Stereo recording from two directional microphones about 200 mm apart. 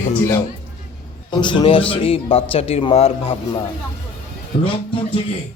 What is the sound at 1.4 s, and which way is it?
A man's voice, 25° left (ahead or behind).